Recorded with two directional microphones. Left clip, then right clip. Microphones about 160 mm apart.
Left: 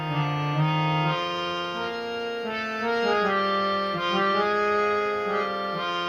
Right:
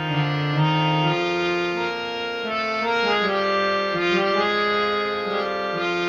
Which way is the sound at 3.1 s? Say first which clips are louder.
Right 2 dB; 25° right (ahead or behind).